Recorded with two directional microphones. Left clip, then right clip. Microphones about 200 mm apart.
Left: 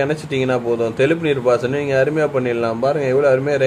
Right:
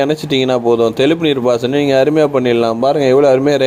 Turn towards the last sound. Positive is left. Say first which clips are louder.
# right 5 dB
turn(degrees=-35)  # may be behind; listen again after turning